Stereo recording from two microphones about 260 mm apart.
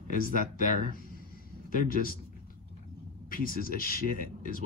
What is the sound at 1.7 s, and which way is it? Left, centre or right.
Speech, left.